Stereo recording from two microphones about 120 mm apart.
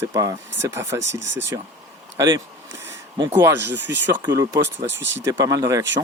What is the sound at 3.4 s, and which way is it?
Speech, 20° right (ahead or behind).